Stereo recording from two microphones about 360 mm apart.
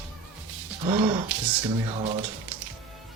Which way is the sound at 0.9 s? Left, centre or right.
Centre.